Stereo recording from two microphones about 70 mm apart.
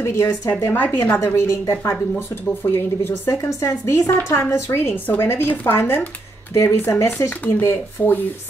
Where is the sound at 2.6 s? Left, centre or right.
Left.